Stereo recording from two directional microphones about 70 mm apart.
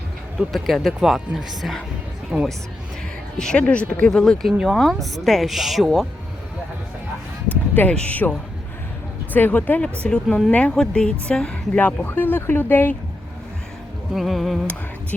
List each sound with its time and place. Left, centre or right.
0.5 s speech: centre
3.3 s a woman's voice: centre
4.1 s a woman's voice: centre
7.8 s speech: left
10.2 s speech: centre
10.5 s a woman's voice: centre
11.8 s speech: left
14.1 s speech: centre